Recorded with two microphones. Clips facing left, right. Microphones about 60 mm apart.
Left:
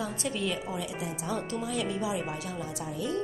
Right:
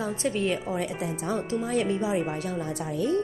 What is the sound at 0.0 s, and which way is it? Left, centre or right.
Speech, right.